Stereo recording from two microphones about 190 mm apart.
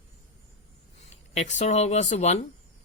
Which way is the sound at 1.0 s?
35° left (ahead or behind).